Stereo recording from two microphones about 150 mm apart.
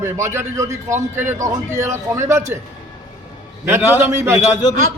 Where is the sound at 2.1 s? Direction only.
20° right (ahead or behind).